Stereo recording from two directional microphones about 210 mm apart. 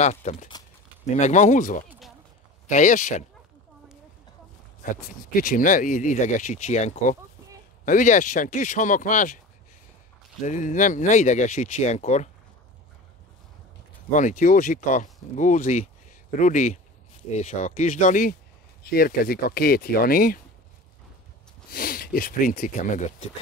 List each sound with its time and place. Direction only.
0.0 s speech: 30° left (ahead or behind)
5.3 s speech: 40° left (ahead or behind)
10.4 s speech: 35° left (ahead or behind)
14.1 s speech: 35° left (ahead or behind)
21.6 s speech: 45° left (ahead or behind)